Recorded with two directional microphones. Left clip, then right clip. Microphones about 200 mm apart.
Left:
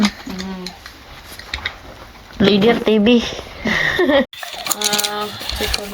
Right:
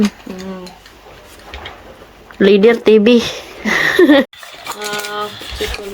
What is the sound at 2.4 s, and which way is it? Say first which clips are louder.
Speech: right 5 dB; 20° right (ahead or behind).